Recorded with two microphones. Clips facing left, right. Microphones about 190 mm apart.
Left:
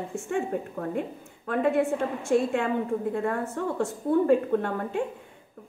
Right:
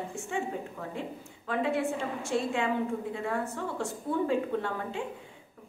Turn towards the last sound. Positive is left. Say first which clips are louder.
# left 6 dB
turn(degrees=55)  # may be behind; listen again after turning